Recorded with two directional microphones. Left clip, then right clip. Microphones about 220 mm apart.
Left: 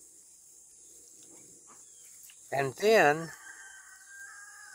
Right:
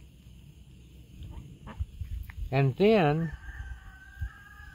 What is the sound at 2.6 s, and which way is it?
Speech, 25° left (ahead or behind).